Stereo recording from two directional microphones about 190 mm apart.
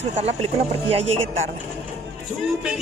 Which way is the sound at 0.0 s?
35° right (ahead or behind).